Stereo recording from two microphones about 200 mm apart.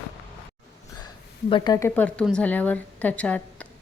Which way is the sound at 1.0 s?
25° left (ahead or behind).